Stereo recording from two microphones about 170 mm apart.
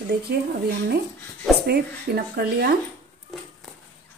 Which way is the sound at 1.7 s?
70° right (ahead or behind).